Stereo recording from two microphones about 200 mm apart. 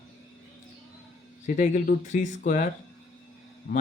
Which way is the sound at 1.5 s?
40° left (ahead or behind).